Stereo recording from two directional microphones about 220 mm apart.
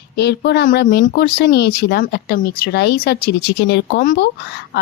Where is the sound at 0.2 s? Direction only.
50° left (ahead or behind).